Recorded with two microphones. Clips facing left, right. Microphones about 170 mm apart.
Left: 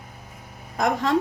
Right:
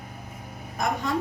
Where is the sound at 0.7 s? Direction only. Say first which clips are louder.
Left 5 dB; 85° left.